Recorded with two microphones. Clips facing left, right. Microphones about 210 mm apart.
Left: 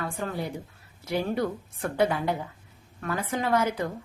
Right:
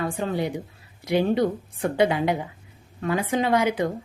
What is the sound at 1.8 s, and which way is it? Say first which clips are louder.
A woman's voice: right 4 dB; 15° right (ahead or behind).